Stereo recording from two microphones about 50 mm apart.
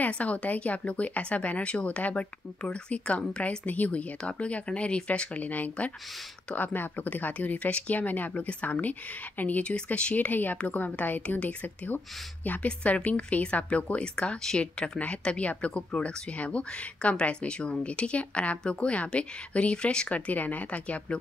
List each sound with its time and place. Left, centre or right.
0.0 s speech: left
3.6 s speech: left
9.6 s speech: left
10.1 s speech: left